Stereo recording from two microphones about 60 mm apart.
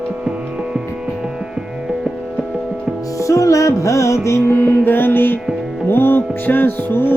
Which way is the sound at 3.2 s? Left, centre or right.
Left.